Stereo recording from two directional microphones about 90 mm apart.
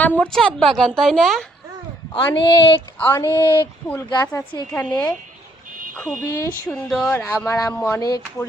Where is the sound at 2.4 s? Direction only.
65° left (ahead or behind).